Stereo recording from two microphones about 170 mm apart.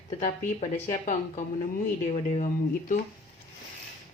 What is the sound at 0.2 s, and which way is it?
A woman's voice, 45° left (ahead or behind).